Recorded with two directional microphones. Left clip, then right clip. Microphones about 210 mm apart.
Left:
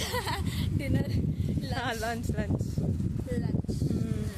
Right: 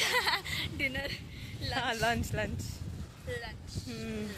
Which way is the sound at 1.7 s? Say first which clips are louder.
Right 2 dB; 5° left (ahead or behind).